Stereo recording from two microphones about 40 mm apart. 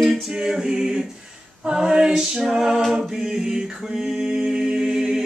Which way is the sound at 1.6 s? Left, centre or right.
Right.